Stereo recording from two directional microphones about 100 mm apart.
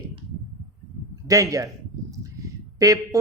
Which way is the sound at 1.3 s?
35° right (ahead or behind).